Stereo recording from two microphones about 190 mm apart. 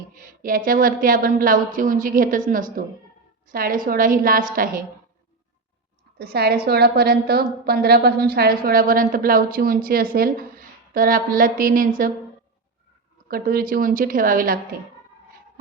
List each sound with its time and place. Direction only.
0.1 s a woman's voice: 45° right (ahead or behind)
6.1 s a woman's voice: 55° right (ahead or behind)
13.2 s a woman's voice: 50° right (ahead or behind)